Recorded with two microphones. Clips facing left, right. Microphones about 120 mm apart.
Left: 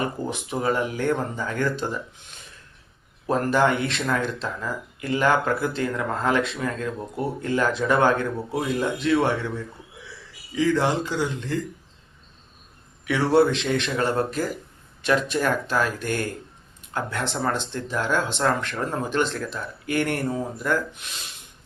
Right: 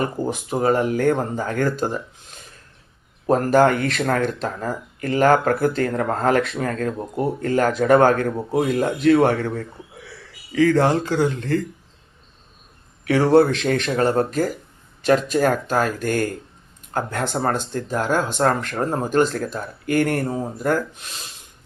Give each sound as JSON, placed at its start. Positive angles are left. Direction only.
{"t": 0.3, "sound": "speech", "side_deg": -40}
{"t": 13.1, "sound": "speech", "side_deg": -40}